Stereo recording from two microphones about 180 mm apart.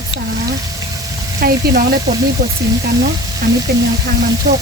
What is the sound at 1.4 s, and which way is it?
Speech, 60° right (ahead or behind).